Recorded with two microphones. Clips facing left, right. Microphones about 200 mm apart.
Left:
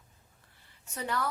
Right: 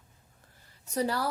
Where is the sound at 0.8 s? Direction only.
35° right (ahead or behind).